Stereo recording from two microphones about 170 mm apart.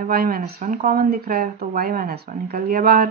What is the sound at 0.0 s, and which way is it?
Speech, 60° right (ahead or behind).